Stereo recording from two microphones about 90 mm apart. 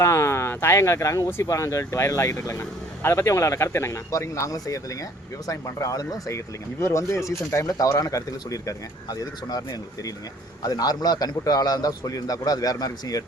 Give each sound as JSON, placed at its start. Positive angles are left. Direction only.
{"t": 0.0, "sound": "a man's voice", "side_deg": 30}